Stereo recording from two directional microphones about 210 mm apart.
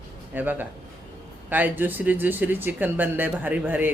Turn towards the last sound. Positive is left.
turn(degrees=-10)  # may be behind; listen again after turning